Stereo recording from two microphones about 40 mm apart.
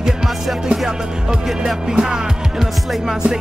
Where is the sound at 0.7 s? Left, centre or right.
Centre.